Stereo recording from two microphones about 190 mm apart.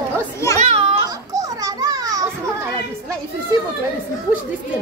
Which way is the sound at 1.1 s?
20° right (ahead or behind).